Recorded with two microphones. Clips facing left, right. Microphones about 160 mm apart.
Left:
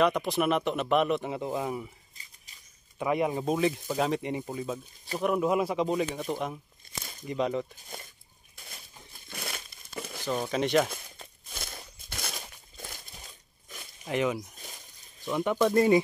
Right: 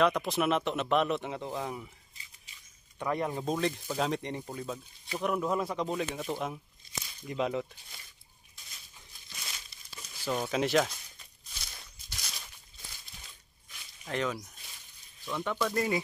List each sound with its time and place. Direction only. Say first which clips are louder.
0.0 s speech: left 2 dB; centre (ahead or behind)
3.0 s speech: left 4 dB; 10° left (ahead or behind)
6.8 s a sound: left 2 dB; 50° left (ahead or behind)
7.2 s speech: left 2 dB; centre (ahead or behind)
7.7 s speech: left 10 dB; 50° left (ahead or behind)
8.5 s crushing: left 7 dB; 60° left (ahead or behind)
9.3 s crumpling: left 9 dB; 60° left (ahead or behind)
10.2 s speech: left 1 dB; centre (ahead or behind)
10.9 s a sound: left 8 dB; 55° left (ahead or behind)
14.0 s speech: left 5 dB; 10° left (ahead or behind)